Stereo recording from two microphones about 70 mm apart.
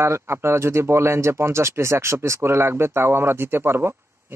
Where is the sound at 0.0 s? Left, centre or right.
Right.